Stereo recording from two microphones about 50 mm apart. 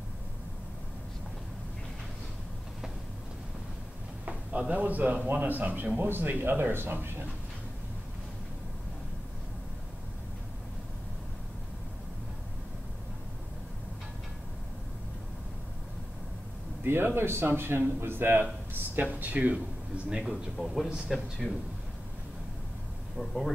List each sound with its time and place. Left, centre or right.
4.3 s speech: right
5.9 s a man's voice: right
16.8 s a man's voice: right
19.1 s speech: right
20.1 s a man's voice: centre
20.5 s speech: centre
21.4 s speech: centre
23.1 s speech: centre